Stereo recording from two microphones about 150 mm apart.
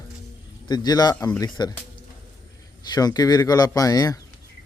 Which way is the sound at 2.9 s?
25° left (ahead or behind).